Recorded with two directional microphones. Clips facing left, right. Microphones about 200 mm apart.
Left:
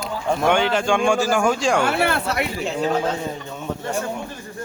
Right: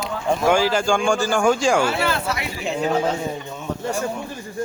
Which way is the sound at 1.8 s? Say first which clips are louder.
Left 1 dB; 60° left (ahead or behind).